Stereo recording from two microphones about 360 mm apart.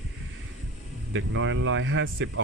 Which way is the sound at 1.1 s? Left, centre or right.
Right.